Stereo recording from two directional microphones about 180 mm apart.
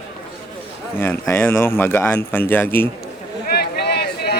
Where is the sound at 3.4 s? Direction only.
65° left (ahead or behind).